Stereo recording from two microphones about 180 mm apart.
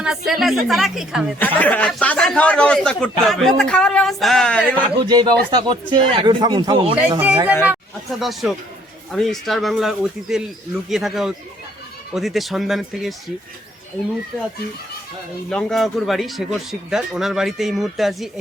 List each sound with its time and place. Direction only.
0.0 s a man's voice: centre (ahead or behind)
1.4 s a man's voice: 10° left (ahead or behind)
4.8 s speech: 25° right (ahead or behind)
7.2 s a man's voice: 10° right (ahead or behind)
15.4 s a man's voice: centre (ahead or behind)